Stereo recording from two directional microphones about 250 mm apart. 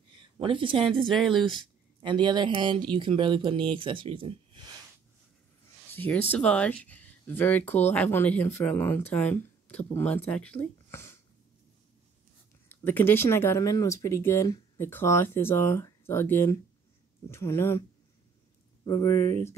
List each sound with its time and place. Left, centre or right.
0.4 s speech: centre
1.0 s speech: centre
1.4 s speech: centre
6.0 s speech: centre
12.6 s speech: centre
18.9 s speech: centre